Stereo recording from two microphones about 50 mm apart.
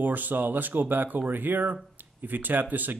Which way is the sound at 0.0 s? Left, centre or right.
Right.